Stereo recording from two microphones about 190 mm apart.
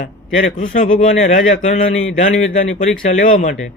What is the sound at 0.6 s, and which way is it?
A man's voice, 40° left (ahead or behind).